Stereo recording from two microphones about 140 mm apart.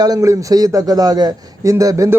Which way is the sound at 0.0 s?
25° right (ahead or behind).